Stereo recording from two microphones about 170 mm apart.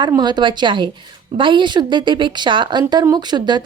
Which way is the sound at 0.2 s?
25° right (ahead or behind).